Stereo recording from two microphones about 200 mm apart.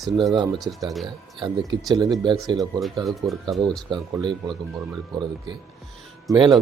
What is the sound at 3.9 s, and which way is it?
Speech, 20° right (ahead or behind).